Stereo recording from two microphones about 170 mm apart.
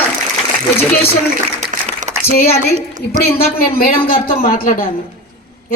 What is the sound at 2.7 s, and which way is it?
Speech, 45° right (ahead or behind).